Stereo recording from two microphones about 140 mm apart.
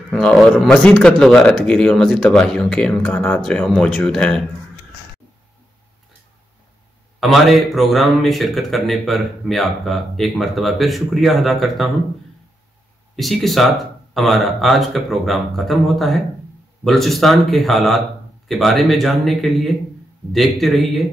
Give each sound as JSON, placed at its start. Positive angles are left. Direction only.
{"t": 0.1, "sound": "a man's voice", "side_deg": 0}
{"t": 7.2, "sound": "a man's voice", "side_deg": 0}
{"t": 13.1, "sound": "a man's voice", "side_deg": 0}